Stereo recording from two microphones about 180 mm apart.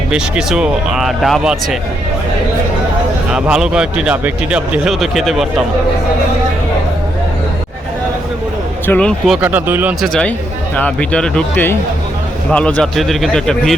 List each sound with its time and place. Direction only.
0.1 s speech: 5° right (ahead or behind)
3.3 s speech: 5° right (ahead or behind)
8.9 s speech: 5° left (ahead or behind); by 10.1 s 10° right (ahead or behind)
10.1 s speech: 5° left (ahead or behind)